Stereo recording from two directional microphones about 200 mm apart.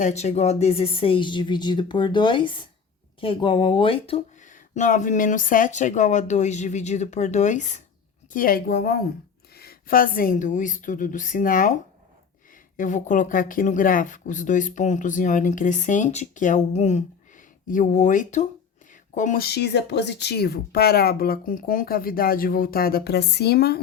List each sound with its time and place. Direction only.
0.0 s speech: 35° left (ahead or behind); by 23.8 s 55° left (ahead or behind)